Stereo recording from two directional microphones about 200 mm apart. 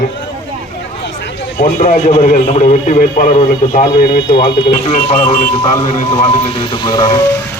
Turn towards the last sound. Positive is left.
turn(degrees=20)  # may be behind; listen again after turning